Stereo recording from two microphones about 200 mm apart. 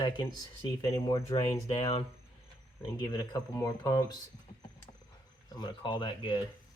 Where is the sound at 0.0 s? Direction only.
20° left (ahead or behind).